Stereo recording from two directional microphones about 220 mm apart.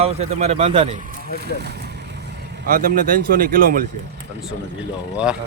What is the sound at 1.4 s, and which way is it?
Vehicle, 50° right (ahead or behind).